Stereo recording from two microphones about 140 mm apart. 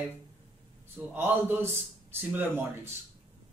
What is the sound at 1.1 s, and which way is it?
A man's voice, 15° right (ahead or behind).